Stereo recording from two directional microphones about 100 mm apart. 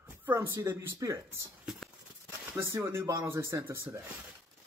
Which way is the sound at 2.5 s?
25° right (ahead or behind).